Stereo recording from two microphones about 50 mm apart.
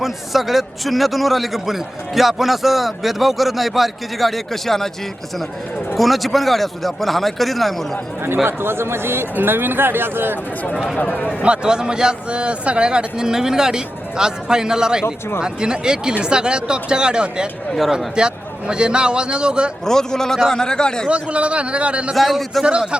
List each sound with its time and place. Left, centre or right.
0.0 s a man's voice: centre
6.0 s a man's voice: centre
8.4 s speech: right
11.2 s a man's voice: left
11.4 s a man's voice: centre
19.8 s speech: centre
21.1 s a man's voice: right
22.1 s a man's voice: centre